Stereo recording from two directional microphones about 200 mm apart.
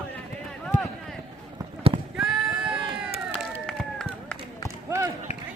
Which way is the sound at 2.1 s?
5° right (ahead or behind).